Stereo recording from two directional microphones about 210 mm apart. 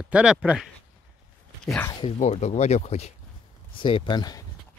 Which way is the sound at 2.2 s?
30° left (ahead or behind).